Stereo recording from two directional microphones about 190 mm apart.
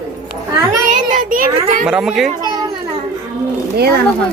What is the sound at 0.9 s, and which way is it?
Child singing, 40° right (ahead or behind).